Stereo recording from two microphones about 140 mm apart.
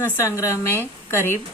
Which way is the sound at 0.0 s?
20° left (ahead or behind).